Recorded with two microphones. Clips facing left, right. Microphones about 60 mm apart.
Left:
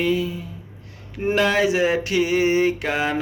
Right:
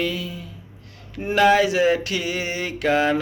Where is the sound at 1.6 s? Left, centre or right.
Centre.